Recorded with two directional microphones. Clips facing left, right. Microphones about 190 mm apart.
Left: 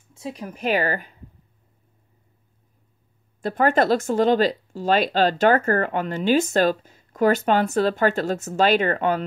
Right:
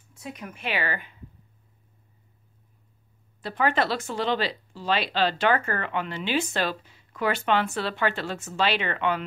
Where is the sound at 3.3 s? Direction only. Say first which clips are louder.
Left 6 dB; 45° left (ahead or behind).